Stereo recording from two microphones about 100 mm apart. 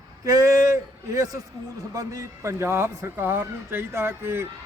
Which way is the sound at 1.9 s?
35° right (ahead or behind).